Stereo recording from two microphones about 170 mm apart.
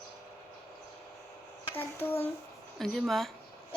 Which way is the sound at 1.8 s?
10° left (ahead or behind).